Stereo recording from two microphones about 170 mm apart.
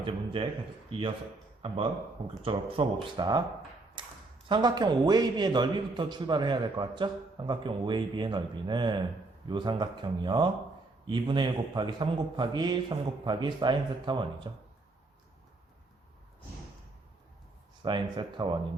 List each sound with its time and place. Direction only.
0.4 s a man's voice: 30° right (ahead or behind)
4.0 s a sound: 30° right (ahead or behind)
4.4 s a man's voice: 25° right (ahead or behind)
17.8 s a man's voice: 30° right (ahead or behind)